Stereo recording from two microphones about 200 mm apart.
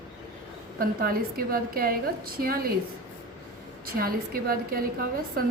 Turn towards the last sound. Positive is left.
turn(degrees=-45)  # may be behind; listen again after turning